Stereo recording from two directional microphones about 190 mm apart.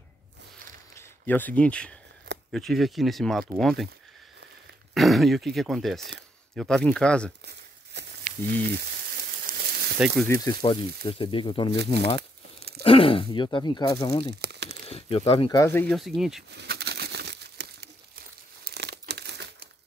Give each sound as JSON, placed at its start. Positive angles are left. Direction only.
{"t": 0.9, "sound": "speech", "side_deg": 10}
{"t": 4.9, "sound": "speech", "side_deg": 0}
{"t": 7.9, "sound": "a sound", "side_deg": -65}
{"t": 9.6, "sound": "a sound", "side_deg": -55}
{"t": 9.9, "sound": "speech", "side_deg": -5}
{"t": 10.2, "sound": "speech", "side_deg": 15}
{"t": 11.7, "sound": "speech", "side_deg": -60}
{"t": 12.2, "sound": "crumpling", "side_deg": -55}
{"t": 12.8, "sound": "speech", "side_deg": 30}
{"t": 14.4, "sound": "crumpling", "side_deg": -60}
{"t": 14.9, "sound": "speech", "side_deg": 30}
{"t": 15.6, "sound": "speech", "side_deg": 10}
{"t": 16.0, "sound": "speech", "side_deg": 0}
{"t": 16.4, "sound": "crumpling", "side_deg": -60}